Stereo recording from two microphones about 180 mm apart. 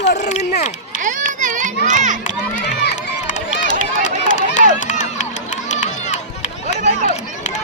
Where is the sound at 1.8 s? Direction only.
45° right (ahead or behind).